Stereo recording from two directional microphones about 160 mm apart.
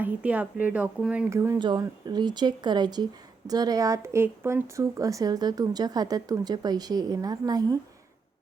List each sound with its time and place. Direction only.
0.0 s speech: 10° right (ahead or behind)
1.3 s speech: 15° right (ahead or behind)
1.5 s speech: 30° right (ahead or behind)